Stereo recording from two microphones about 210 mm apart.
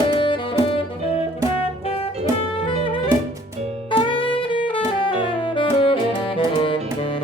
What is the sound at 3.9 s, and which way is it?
Saxophone, 25° left (ahead or behind).